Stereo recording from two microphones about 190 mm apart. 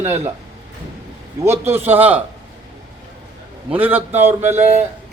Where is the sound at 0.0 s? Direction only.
35° right (ahead or behind).